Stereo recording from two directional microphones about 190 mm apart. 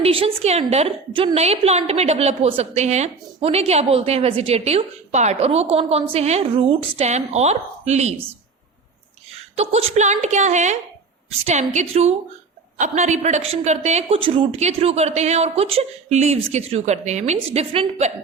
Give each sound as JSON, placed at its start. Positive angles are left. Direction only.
{"t": 0.0, "sound": "a woman's voice", "side_deg": -30}
{"t": 9.6, "sound": "a woman's voice", "side_deg": -35}